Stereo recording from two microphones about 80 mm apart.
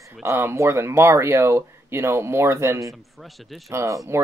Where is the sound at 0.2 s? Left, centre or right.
Right.